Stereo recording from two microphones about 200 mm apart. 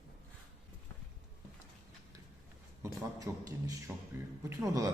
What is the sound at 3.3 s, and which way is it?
Speech, 15° right (ahead or behind).